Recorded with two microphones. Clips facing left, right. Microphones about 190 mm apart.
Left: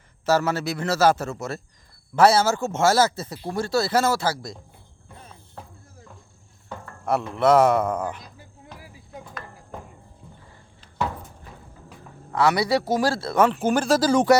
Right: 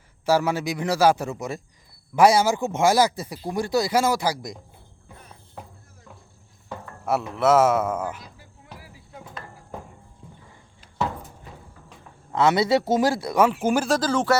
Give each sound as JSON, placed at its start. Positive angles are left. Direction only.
{"t": 0.3, "sound": "speech", "side_deg": -10}
{"t": 6.7, "sound": "speech", "side_deg": -5}
{"t": 8.4, "sound": "music", "side_deg": 20}
{"t": 12.3, "sound": "speech", "side_deg": -20}
{"t": 13.9, "sound": "speech", "side_deg": 10}